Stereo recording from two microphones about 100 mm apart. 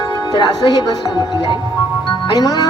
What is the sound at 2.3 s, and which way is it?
Speech, 40° left (ahead or behind).